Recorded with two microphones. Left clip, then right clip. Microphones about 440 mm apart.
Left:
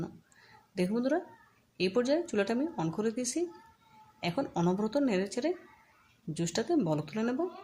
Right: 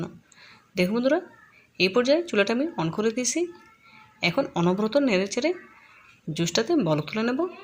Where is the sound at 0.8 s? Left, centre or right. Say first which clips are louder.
Right 8 dB; right.